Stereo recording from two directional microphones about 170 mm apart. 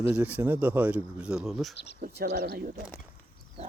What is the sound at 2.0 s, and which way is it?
Speech, 60° right (ahead or behind).